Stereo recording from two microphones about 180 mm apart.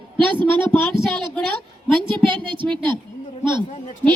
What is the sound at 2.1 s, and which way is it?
Speech, 25° right (ahead or behind).